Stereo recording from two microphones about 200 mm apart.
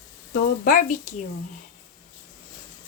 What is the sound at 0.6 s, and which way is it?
Speech, 45° left (ahead or behind).